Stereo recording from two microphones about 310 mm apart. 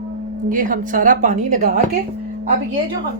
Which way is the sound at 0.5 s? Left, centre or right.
Right.